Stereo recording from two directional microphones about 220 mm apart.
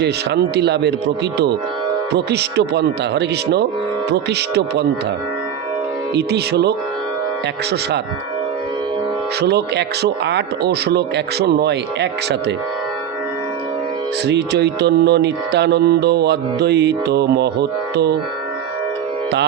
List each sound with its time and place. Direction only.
0.5 s music: 50° right (ahead or behind)
6.1 s music: 50° right (ahead or behind)
9.4 s music: 50° right (ahead or behind)
14.3 s music: 50° right (ahead or behind)